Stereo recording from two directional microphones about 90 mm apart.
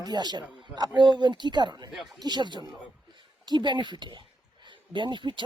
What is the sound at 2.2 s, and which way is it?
Speech, 50° right (ahead or behind).